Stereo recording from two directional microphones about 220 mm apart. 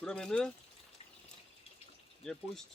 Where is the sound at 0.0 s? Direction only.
5° left (ahead or behind).